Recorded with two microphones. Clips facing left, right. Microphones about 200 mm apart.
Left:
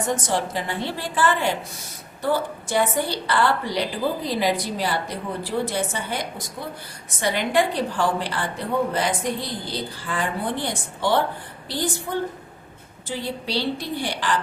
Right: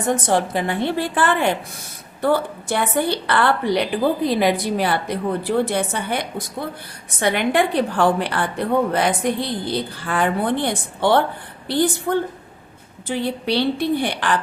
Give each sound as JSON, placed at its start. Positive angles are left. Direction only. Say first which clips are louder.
{"t": 0.1, "sound": "a woman's voice", "louder": "right 8 dB", "side_deg": -60}